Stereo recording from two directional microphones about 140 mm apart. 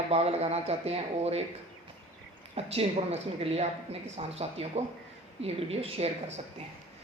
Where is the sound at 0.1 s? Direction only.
50° right (ahead or behind).